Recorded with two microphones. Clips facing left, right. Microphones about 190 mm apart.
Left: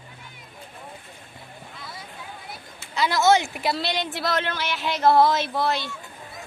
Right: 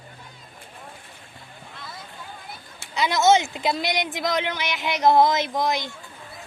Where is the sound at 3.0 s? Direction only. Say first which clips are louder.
Right 1 dB; 20° right (ahead or behind).